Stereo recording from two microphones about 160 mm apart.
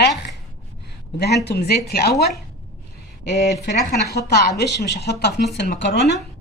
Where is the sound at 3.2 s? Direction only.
90° left.